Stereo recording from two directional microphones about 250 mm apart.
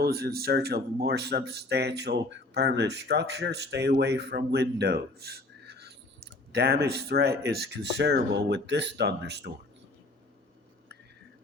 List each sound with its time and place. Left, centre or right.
0.0 s speech: right